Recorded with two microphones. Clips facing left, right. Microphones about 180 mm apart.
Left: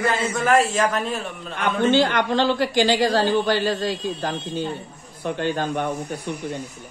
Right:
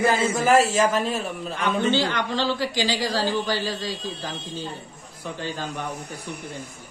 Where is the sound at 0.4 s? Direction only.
Centre (ahead or behind).